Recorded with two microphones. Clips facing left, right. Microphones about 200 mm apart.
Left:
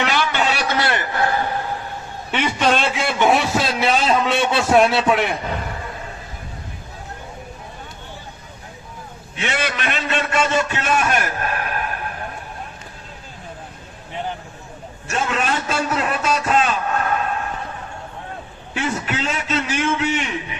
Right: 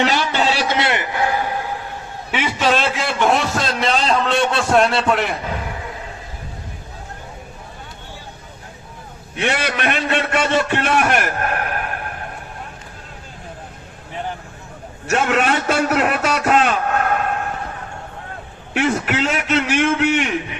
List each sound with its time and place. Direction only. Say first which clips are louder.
0.0 s a sound: right 2 dB; 35° right (ahead or behind); by 5.4 s centre (ahead or behind)
9.4 s a man's voice: right 3 dB; 55° right (ahead or behind)
15.1 s a man's voice: right 5 dB; 70° right (ahead or behind)
18.7 s a man's voice: right 5 dB; 70° right (ahead or behind)